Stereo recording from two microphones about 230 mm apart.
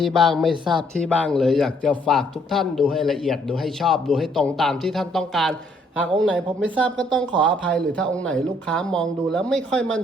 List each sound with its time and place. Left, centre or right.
0.0 s speech: centre
0.6 s speech: centre
1.0 s speech: centre